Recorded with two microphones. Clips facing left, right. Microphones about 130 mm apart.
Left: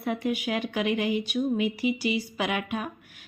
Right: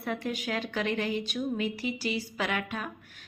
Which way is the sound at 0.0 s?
15° left (ahead or behind).